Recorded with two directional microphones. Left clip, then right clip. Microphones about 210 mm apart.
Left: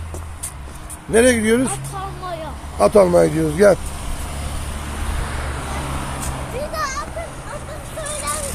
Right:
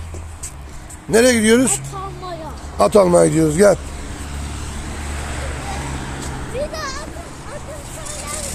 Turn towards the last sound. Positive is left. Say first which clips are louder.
# left 1 dB
turn(degrees=-30)  # may be behind; listen again after turning